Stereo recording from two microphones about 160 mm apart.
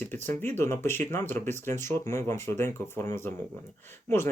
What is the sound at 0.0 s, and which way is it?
Speech, 15° left (ahead or behind).